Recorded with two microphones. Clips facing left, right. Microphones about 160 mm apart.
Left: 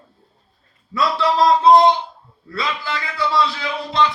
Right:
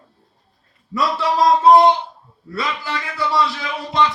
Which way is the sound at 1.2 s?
10° right (ahead or behind).